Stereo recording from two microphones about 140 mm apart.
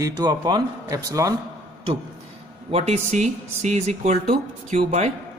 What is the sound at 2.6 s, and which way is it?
Speech, 50° right (ahead or behind).